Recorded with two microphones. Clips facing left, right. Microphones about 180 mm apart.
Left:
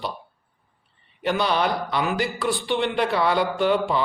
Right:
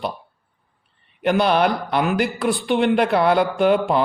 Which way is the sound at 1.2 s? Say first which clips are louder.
Right 5 dB; 55° right (ahead or behind).